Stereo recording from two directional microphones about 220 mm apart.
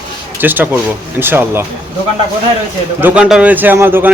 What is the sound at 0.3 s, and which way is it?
A man's voice, 10° right (ahead or behind).